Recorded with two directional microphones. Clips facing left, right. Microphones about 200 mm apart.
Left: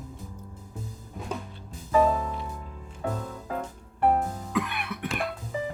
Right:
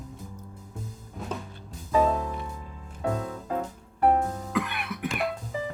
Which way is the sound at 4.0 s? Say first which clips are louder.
Right 1 dB; centre (ahead or behind).